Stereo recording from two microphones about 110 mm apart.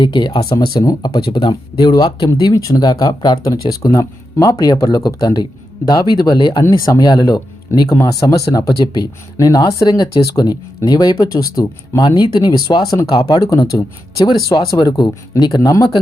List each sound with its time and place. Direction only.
0.0 s speech: 40° left (ahead or behind)
6.6 s speech: 30° left (ahead or behind)
12.0 s speech: 45° left (ahead or behind)